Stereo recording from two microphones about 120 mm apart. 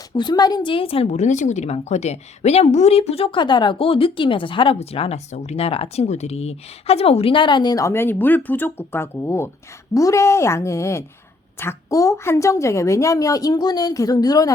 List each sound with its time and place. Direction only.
0.1 s a woman's voice: 40° left (ahead or behind)
1.0 s a woman's voice: 80° left; by 3.4 s 55° left (ahead or behind)
3.4 s a woman's voice: 40° left (ahead or behind)